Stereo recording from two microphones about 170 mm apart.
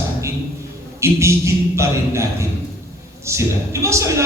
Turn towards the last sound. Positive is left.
turn(degrees=-15)  # may be behind; listen again after turning